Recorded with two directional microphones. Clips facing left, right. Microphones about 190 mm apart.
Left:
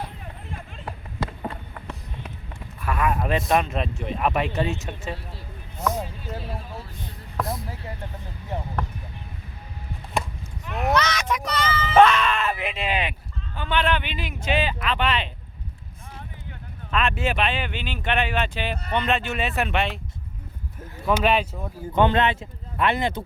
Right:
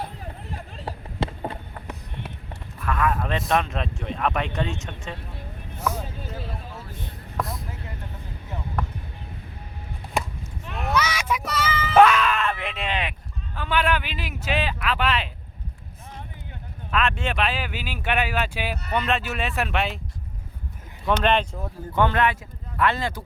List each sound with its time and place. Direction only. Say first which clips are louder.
0.5 s a sound: right 1 dB; 30° right (ahead or behind)
2.8 s speech: even; 10° left (ahead or behind)
5.9 s vehicle: left 2 dB; 10° right (ahead or behind)
7.3 s speech: left 2 dB; centre (ahead or behind)
10.9 s child singing: right 1 dB; 10° right (ahead or behind)
11.9 s groan: even; 5° right (ahead or behind)
13.6 s speech: even; 5° right (ahead or behind)
16.9 s speech: left 1 dB; centre (ahead or behind)
21.1 s speech: even; 5° left (ahead or behind)
21.9 s speech: left 2 dB; 20° left (ahead or behind)